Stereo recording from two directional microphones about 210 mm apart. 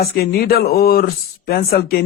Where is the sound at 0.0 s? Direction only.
45° left (ahead or behind).